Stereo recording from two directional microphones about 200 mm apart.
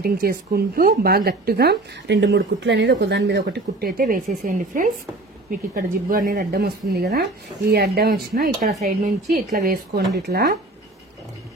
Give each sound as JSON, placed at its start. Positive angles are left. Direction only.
{"t": 0.0, "sound": "speech", "side_deg": -50}
{"t": 6.5, "sound": "speech", "side_deg": -55}
{"t": 9.0, "sound": "speech", "side_deg": -35}
{"t": 10.1, "sound": "speech", "side_deg": -50}